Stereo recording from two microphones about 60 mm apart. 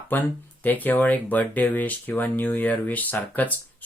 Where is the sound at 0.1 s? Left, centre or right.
Left.